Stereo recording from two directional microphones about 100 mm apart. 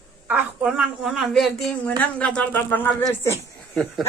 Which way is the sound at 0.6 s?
5° right (ahead or behind).